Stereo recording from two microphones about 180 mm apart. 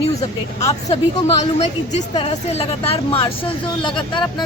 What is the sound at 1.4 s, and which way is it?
A woman's voice, 40° left (ahead or behind).